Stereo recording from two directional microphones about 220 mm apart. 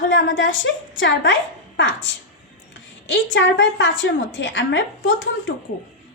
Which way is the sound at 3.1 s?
55° left (ahead or behind).